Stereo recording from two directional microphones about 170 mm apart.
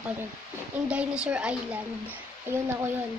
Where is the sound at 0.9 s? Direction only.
5° right (ahead or behind).